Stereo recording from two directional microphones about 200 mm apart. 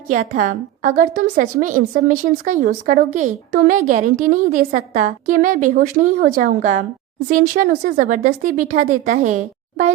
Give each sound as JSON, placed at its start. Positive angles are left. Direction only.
{"t": 0.1, "sound": "a woman's voice", "side_deg": -40}